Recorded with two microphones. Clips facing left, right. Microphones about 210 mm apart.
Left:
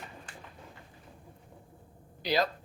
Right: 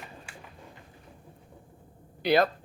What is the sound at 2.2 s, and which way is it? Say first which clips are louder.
Speech: right 6 dB; 60° right (ahead or behind).